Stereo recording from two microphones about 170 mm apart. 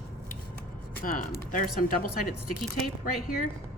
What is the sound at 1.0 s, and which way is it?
Speech, 55° left (ahead or behind).